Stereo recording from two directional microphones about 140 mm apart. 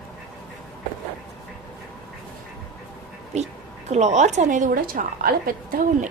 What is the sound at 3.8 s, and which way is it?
A woman's voice, 55° right (ahead or behind).